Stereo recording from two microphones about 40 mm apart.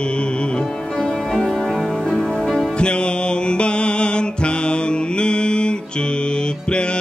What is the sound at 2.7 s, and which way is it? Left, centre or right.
Music, left.